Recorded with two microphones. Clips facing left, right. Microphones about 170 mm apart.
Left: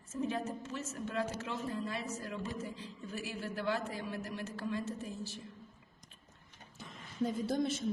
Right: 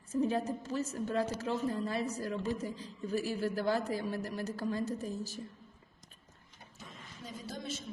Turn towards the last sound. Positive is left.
turn(degrees=55)  # may be behind; listen again after turning